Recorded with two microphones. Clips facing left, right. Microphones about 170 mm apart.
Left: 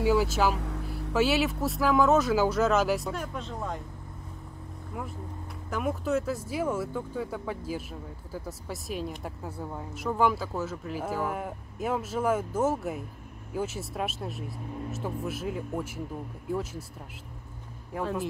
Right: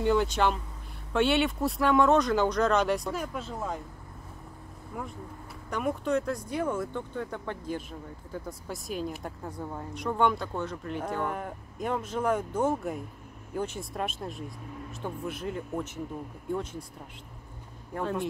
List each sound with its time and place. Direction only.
0.0 s speech: 5° left (ahead or behind)
0.6 s a sound: 75° left (ahead or behind)
1.1 s speech: 5° left (ahead or behind)
5.7 s speech: centre (ahead or behind)
17.9 s speech: 5° left (ahead or behind)